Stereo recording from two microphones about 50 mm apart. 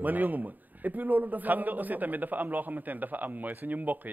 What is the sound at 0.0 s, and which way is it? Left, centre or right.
A man's voice, right.